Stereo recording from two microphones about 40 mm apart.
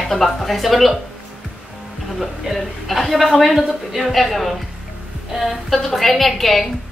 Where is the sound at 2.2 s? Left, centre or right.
Centre.